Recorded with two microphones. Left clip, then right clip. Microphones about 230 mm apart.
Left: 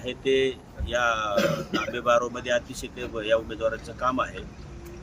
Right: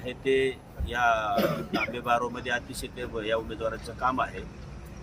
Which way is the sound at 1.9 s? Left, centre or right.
Centre.